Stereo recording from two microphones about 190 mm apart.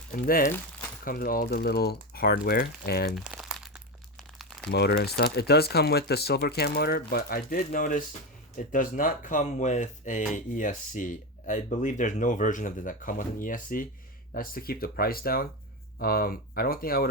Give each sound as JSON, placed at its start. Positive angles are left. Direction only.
{"t": 0.1, "sound": "speech", "side_deg": 50}
{"t": 3.1, "sound": "crumpling", "side_deg": -5}
{"t": 4.7, "sound": "speech", "side_deg": 60}